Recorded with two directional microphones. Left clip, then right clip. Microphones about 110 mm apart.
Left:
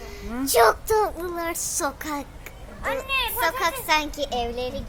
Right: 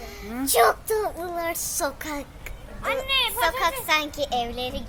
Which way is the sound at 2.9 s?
20° left (ahead or behind).